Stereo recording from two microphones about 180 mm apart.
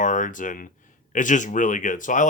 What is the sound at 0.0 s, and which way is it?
Speech, 45° left (ahead or behind).